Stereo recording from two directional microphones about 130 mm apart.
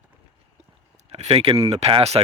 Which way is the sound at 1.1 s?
50° right (ahead or behind).